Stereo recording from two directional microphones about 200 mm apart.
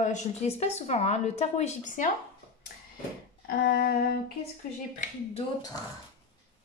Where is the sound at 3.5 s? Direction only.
50° left (ahead or behind).